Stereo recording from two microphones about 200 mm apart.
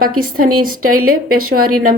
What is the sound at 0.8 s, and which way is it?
Speech, 90° right.